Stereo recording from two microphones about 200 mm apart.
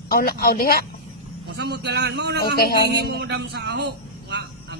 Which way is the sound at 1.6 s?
55° right (ahead or behind).